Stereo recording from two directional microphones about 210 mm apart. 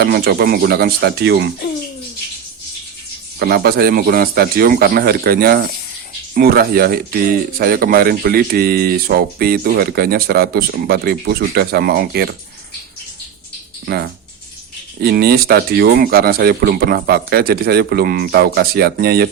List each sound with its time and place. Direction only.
0.0 s speech: 45° right (ahead or behind)
3.3 s speech: 50° right (ahead or behind)
13.8 s speech: 50° right (ahead or behind)